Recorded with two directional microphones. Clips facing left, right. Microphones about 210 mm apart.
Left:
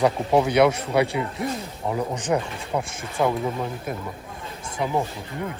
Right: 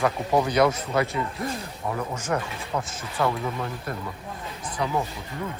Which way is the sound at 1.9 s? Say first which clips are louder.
Left 4 dB; 15° left (ahead or behind).